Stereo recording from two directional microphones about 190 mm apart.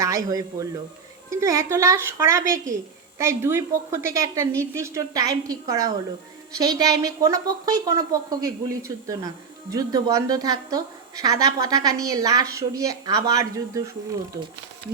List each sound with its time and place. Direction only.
0.0 s a woman's voice: 20° right (ahead or behind)